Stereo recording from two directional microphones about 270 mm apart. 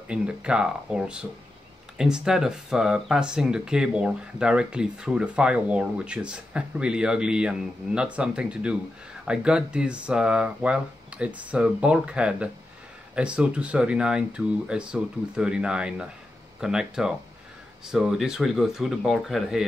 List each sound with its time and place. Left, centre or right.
0.1 s speech: centre